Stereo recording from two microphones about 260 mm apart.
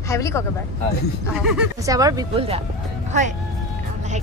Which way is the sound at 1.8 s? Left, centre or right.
Centre.